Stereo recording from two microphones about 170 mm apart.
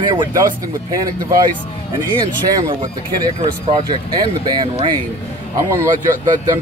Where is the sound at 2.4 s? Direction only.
20° right (ahead or behind).